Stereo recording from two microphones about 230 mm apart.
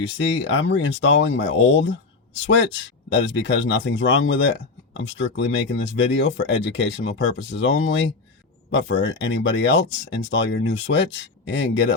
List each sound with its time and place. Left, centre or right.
0.2 s speech: left